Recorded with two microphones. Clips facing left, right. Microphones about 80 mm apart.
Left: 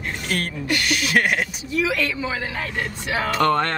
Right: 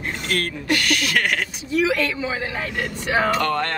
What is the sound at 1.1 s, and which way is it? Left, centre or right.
Speech, centre.